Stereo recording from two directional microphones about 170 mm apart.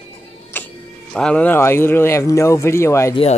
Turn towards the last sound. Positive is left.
turn(degrees=15)  # may be behind; listen again after turning